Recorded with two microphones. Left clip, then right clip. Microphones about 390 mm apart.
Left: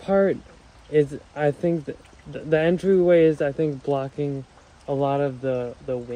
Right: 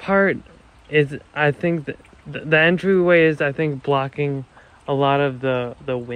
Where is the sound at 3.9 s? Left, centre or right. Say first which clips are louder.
Right 5 dB; right.